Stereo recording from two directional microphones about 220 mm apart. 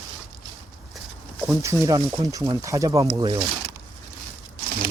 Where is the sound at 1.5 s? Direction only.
15° right (ahead or behind).